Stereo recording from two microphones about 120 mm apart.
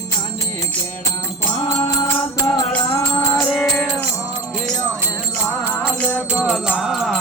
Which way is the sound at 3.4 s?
5° left (ahead or behind).